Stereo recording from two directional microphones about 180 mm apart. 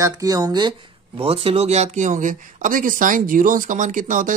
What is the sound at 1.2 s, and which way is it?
Speech, 35° right (ahead or behind).